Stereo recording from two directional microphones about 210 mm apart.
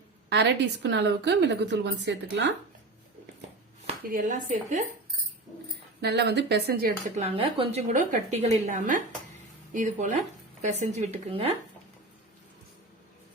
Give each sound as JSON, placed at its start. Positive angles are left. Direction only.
{"t": 0.3, "sound": "a woman's voice", "side_deg": -55}
{"t": 3.8, "sound": "speech", "side_deg": -40}
{"t": 6.0, "sound": "speech", "side_deg": -50}
{"t": 7.2, "sound": "speech", "side_deg": -25}
{"t": 7.9, "sound": "a woman's voice", "side_deg": -35}